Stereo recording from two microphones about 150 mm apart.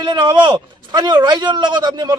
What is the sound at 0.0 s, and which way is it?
Speech, 30° right (ahead or behind).